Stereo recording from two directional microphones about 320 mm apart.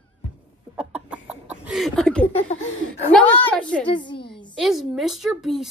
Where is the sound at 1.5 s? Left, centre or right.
Centre.